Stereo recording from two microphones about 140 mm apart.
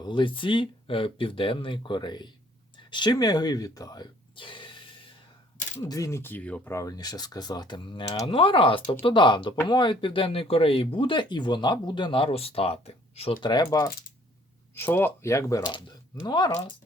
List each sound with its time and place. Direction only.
0.0 s speech: 35° left (ahead or behind)
5.7 s coin: 20° left (ahead or behind)
6.7 s speech: 25° left (ahead or behind)
14.8 s speech: 15° left (ahead or behind)